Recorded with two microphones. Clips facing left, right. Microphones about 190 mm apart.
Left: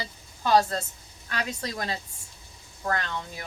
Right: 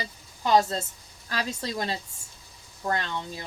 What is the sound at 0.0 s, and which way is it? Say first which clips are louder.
A woman's voice: even; 20° right (ahead or behind).